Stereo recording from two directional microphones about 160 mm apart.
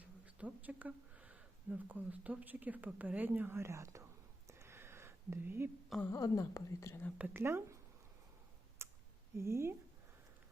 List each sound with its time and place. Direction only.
0.0 s speech: 10° right (ahead or behind)
4.4 s a sound: 15° right (ahead or behind)
6.1 s speech: 20° left (ahead or behind)
7.2 s speech: 15° right (ahead or behind)
8.8 s clicking: 15° right (ahead or behind)
9.4 s speech: 15° right (ahead or behind)